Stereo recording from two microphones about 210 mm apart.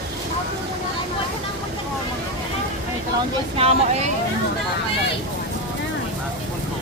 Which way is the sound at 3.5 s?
30° right (ahead or behind).